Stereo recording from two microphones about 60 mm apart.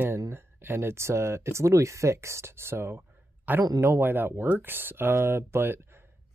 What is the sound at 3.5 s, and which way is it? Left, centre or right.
Speech, right.